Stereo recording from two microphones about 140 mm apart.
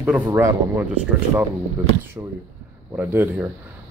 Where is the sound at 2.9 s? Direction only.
15° right (ahead or behind).